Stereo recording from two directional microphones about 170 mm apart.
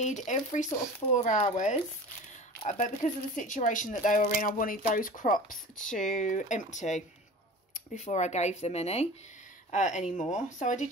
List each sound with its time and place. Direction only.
0.0 s speech: 45° left (ahead or behind)